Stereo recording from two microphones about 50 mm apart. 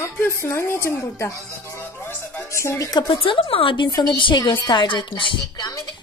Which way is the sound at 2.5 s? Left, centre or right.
Left.